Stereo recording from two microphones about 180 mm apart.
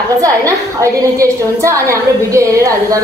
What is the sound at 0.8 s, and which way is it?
A woman's voice, 15° right (ahead or behind).